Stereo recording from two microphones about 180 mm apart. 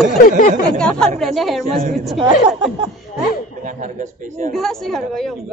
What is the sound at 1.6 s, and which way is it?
Speech, 40° right (ahead or behind).